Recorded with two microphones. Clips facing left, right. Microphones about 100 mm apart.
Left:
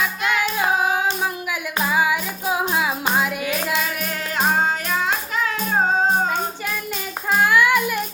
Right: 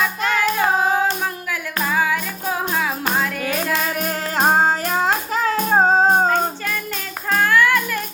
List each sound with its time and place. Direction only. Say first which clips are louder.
1.8 s music: even; 10° left (ahead or behind)
3.4 s child singing: right 2 dB; 40° right (ahead or behind)
7.3 s music: even; 15° left (ahead or behind)